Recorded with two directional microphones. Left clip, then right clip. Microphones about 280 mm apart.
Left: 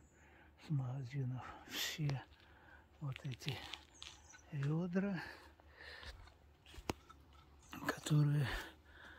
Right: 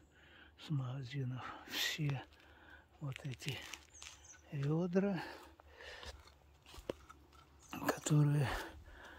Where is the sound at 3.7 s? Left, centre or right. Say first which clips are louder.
Even; centre.